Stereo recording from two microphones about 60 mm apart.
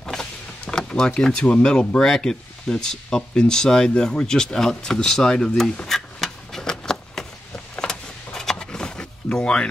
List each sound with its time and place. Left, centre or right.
0.0 s speech: centre
5.6 s a sound: centre
7.8 s power windows: centre